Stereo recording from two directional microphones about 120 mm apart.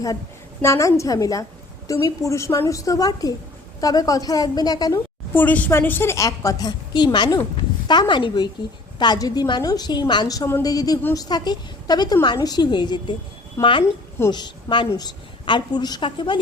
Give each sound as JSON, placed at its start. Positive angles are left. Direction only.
{"t": 0.6, "sound": "a woman's voice", "side_deg": 25}
{"t": 5.3, "sound": "a woman's voice", "side_deg": 15}